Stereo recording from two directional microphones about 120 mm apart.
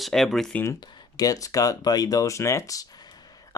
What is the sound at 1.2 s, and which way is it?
Speech, 30° left (ahead or behind).